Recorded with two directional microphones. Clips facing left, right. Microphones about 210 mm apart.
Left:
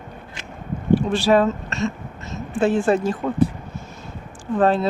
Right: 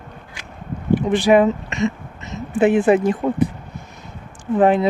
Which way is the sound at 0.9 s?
20° right (ahead or behind).